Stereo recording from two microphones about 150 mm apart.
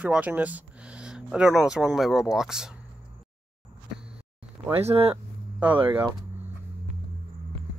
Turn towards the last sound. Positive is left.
turn(degrees=-35)  # may be behind; listen again after turning